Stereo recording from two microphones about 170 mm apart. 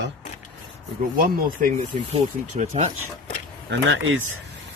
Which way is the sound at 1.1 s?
55° right (ahead or behind).